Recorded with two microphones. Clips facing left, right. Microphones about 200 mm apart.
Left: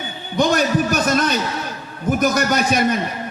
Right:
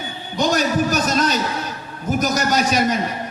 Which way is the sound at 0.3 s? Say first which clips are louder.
Left 2 dB; 55° left (ahead or behind).